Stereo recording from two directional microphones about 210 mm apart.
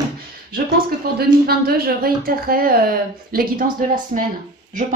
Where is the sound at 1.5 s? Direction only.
45° right (ahead or behind).